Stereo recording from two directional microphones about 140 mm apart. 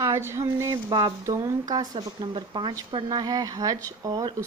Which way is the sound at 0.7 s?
35° right (ahead or behind).